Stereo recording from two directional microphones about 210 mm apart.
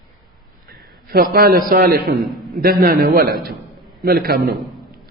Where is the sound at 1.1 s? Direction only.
45° right (ahead or behind).